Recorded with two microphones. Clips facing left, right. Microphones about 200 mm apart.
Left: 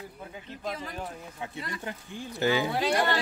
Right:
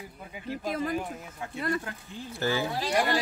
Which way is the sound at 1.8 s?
15° left (ahead or behind).